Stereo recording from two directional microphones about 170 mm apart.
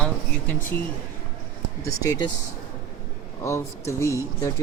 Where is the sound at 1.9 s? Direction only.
20° left (ahead or behind).